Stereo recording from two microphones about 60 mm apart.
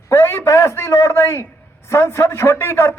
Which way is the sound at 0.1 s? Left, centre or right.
Left.